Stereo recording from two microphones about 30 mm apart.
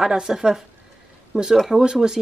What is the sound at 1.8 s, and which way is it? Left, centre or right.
Speech, right.